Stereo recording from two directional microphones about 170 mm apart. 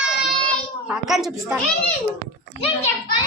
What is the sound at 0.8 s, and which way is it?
Speech, centre (ahead or behind).